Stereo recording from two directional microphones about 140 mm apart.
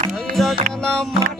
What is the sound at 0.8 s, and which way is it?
Music, 5° left (ahead or behind).